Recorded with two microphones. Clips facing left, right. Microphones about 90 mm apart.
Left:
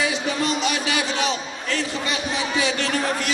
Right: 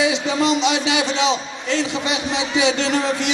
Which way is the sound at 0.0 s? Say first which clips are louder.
Right 5 dB; 20° right (ahead or behind).